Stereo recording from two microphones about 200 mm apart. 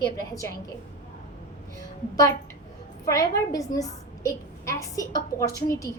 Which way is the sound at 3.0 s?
15° left (ahead or behind).